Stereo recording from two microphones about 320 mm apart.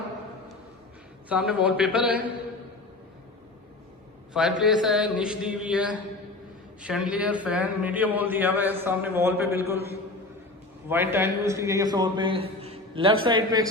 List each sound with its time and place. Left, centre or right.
1.3 s a man's voice: centre
4.4 s a man's voice: centre
10.8 s a man's voice: centre
12.6 s a sound: centre
13.2 s a man's voice: centre